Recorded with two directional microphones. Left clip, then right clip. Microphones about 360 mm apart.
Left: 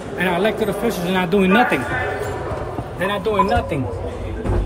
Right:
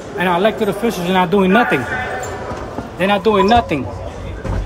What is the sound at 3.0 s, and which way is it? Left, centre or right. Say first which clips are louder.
Speech: right 7 dB; centre.